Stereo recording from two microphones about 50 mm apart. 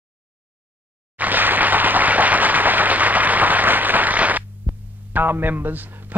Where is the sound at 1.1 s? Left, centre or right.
Right.